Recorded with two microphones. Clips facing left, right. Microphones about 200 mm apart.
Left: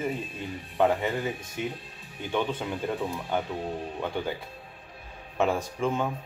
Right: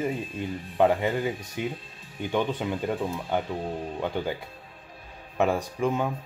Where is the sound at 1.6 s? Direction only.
15° right (ahead or behind).